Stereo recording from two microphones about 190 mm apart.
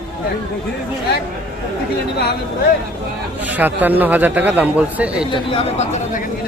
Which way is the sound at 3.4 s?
10° right (ahead or behind).